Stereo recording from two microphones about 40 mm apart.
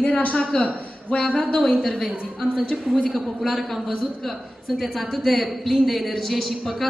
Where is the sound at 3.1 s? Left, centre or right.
Centre.